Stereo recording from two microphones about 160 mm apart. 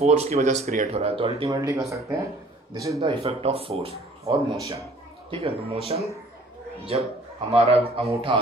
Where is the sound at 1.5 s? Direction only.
20° right (ahead or behind).